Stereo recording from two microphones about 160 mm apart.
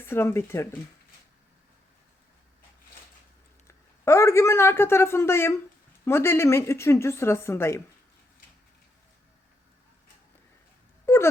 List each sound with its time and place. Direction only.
0.0 s speech: 15° left (ahead or behind)
3.7 s a man's voice: 15° left (ahead or behind)
11.0 s wail: 15° left (ahead or behind)